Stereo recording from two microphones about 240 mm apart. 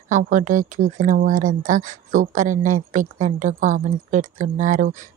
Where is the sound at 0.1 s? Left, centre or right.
Right.